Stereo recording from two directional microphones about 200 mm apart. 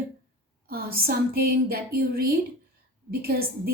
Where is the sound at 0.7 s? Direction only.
50° right (ahead or behind).